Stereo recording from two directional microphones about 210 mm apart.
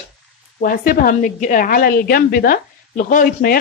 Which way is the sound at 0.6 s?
40° left (ahead or behind).